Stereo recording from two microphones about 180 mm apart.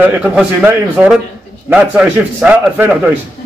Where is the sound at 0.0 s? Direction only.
10° right (ahead or behind).